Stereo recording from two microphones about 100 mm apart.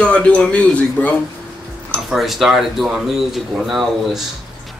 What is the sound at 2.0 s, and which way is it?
Speech, centre (ahead or behind).